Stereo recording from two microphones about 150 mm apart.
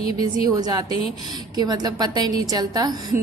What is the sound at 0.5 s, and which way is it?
Speech, 25° right (ahead or behind).